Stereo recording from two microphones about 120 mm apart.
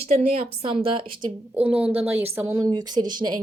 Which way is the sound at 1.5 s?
10° right (ahead or behind).